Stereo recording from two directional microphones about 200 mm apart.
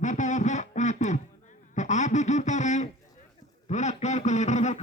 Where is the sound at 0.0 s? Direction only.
35° left (ahead or behind).